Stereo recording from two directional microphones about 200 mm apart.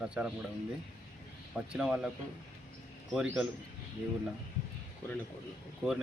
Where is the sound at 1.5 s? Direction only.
5° right (ahead or behind).